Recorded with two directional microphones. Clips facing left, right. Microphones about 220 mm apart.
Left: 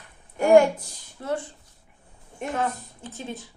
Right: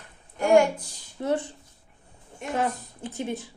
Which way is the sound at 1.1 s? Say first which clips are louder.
Right 3 dB; 20° right (ahead or behind).